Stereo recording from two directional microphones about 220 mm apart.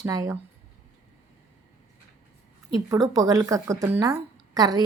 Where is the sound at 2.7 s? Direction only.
15° right (ahead or behind).